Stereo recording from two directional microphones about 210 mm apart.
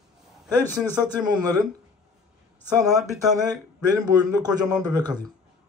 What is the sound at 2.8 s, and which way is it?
Speech, 15° right (ahead or behind).